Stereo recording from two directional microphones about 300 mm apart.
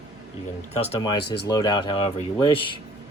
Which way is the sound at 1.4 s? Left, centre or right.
Centre.